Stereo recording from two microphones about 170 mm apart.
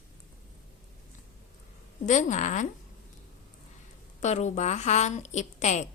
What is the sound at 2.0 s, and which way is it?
Speech, 45° left (ahead or behind).